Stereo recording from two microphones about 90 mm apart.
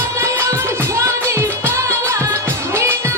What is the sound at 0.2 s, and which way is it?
Music, 30° right (ahead or behind).